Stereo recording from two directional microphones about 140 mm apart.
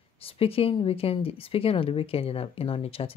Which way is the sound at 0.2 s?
40° left (ahead or behind).